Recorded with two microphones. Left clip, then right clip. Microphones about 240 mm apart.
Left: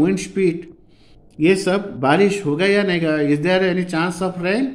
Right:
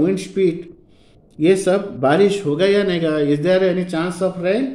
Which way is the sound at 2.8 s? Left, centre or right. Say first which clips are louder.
Right 1 dB; centre.